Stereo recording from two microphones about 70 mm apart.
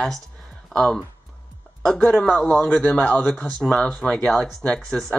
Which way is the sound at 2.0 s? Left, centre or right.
Centre.